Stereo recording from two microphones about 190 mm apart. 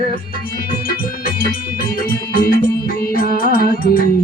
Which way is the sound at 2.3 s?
50° left (ahead or behind).